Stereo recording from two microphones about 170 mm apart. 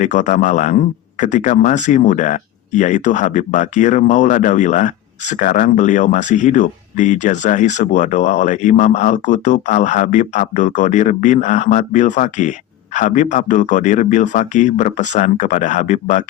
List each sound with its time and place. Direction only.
0.0 s speech: 45° left (ahead or behind)